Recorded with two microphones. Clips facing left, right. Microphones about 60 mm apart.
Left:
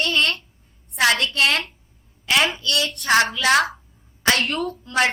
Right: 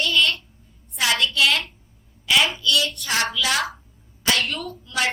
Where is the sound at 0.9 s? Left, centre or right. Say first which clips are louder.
Left 2 dB; left.